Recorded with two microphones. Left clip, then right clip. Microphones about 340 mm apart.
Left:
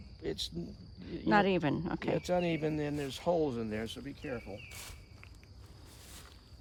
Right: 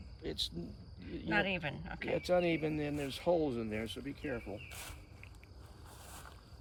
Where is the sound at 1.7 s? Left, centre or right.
Left.